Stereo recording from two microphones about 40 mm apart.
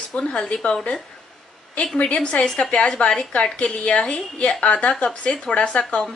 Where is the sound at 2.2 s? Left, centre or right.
Left.